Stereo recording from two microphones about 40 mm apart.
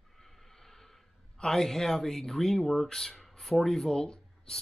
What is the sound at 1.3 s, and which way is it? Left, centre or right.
Speech, centre.